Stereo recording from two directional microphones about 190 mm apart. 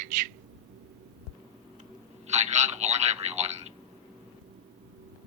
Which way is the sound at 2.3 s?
35° right (ahead or behind).